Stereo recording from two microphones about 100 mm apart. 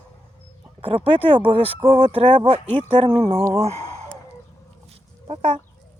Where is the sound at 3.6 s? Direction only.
90° right.